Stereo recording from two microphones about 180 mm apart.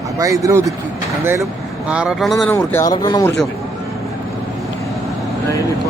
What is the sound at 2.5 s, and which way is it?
Speech, 15° left (ahead or behind).